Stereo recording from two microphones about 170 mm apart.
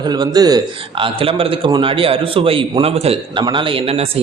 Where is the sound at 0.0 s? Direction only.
25° right (ahead or behind).